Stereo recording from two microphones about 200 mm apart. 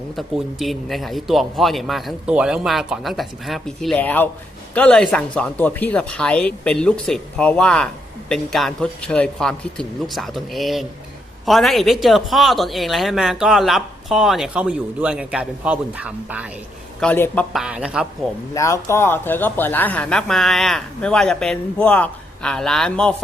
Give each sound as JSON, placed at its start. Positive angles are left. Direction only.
{"t": 0.2, "sound": "speech", "side_deg": 0}
{"t": 17.0, "sound": "speech", "side_deg": 5}
{"t": 18.5, "sound": "speech", "side_deg": 15}